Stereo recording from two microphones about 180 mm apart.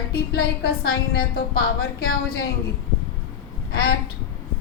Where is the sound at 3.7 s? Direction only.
60° left (ahead or behind).